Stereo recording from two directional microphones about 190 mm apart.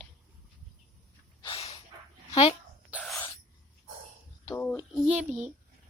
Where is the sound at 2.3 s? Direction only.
30° left (ahead or behind).